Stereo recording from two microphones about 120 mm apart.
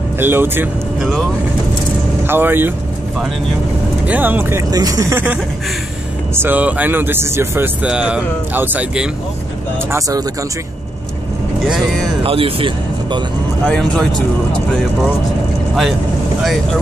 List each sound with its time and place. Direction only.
0.2 s speech: 15° right (ahead or behind)
2.2 s speech: 15° right (ahead or behind)
4.0 s speech: 15° right (ahead or behind)
4.6 s speech: 30° right (ahead or behind)
6.3 s speech: 15° right (ahead or behind)
7.8 s speech: 10° right (ahead or behind)
9.9 s speech: 30° right (ahead or behind)
12.2 s speech: 50° right (ahead or behind)
13.7 s speech: 5° left (ahead or behind)